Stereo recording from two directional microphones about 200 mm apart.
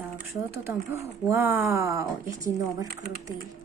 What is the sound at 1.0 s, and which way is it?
Speech, 10° right (ahead or behind).